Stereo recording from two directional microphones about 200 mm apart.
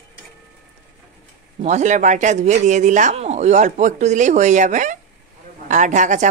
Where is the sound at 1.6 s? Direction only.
35° right (ahead or behind).